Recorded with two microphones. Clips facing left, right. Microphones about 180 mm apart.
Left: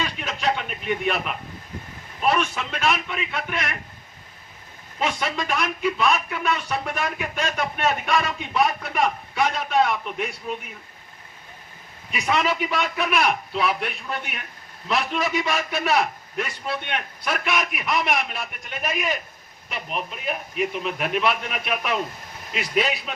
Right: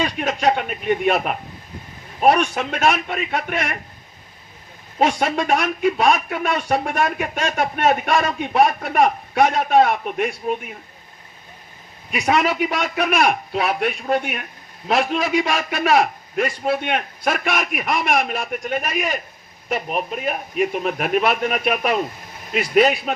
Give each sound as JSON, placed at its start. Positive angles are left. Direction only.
{"t": 0.0, "sound": "speech", "side_deg": -45}
{"t": 4.9, "sound": "speech", "side_deg": -50}
{"t": 12.1, "sound": "speech", "side_deg": -50}
{"t": 15.4, "sound": "a man's voice", "side_deg": -90}
{"t": 15.8, "sound": "speech", "side_deg": -50}